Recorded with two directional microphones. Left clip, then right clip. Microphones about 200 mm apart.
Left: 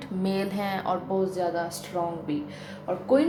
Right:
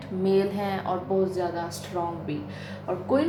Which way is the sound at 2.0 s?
35° left (ahead or behind).